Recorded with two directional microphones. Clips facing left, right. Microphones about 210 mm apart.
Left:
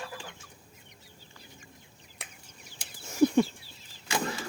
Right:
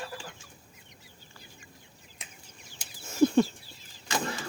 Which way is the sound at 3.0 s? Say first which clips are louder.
Even; 15° left (ahead or behind).